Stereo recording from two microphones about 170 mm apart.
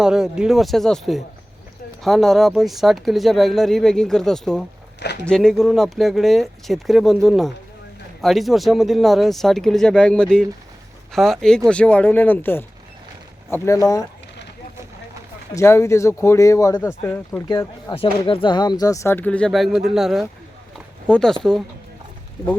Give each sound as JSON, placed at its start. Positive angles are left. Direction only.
{"t": 0.0, "sound": "speech", "side_deg": -5}
{"t": 15.5, "sound": "speech", "side_deg": 15}
{"t": 17.9, "sound": "speech", "side_deg": 30}
{"t": 20.7, "sound": "a sound", "side_deg": 5}